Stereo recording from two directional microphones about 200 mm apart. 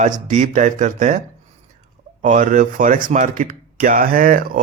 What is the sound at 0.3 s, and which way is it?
Speech, 40° right (ahead or behind).